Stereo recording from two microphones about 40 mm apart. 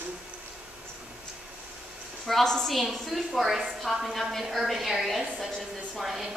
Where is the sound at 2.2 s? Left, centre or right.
Centre.